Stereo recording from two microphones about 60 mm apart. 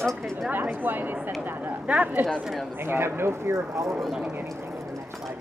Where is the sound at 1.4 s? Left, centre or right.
Right.